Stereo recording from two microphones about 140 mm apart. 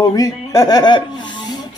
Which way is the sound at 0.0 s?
25° left (ahead or behind).